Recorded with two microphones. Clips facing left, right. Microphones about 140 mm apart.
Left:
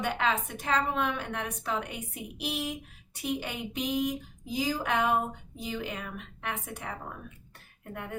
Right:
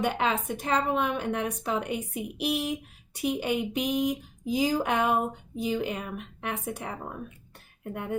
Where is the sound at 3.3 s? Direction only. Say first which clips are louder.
Right 7 dB; 15° right (ahead or behind).